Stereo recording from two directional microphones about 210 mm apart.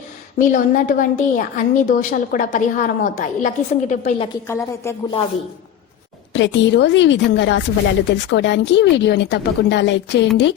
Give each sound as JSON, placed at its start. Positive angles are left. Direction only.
{"t": 0.3, "sound": "a woman's voice", "side_deg": 40}
{"t": 4.4, "sound": "speech", "side_deg": 10}
{"t": 6.3, "sound": "speech", "side_deg": 60}